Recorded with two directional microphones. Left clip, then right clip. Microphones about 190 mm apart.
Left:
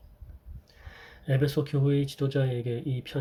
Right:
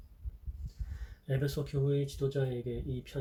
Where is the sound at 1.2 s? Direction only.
40° left (ahead or behind).